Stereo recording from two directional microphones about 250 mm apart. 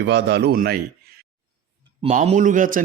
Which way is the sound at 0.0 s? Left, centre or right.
Right.